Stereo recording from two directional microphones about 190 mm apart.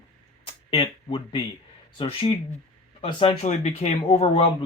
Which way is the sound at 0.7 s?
30° left (ahead or behind).